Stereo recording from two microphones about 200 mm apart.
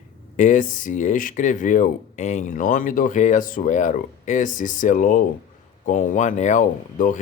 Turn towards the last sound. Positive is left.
turn(degrees=40)  # may be behind; listen again after turning